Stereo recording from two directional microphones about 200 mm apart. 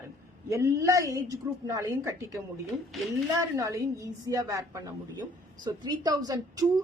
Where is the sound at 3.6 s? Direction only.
15° right (ahead or behind).